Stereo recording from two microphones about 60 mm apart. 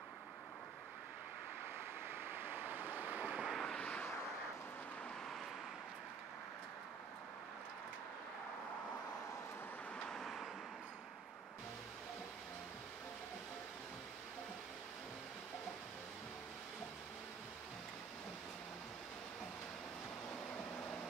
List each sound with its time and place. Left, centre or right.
2.2 s waves: right
3.4 s vehicle: centre
10.0 s vehicle: centre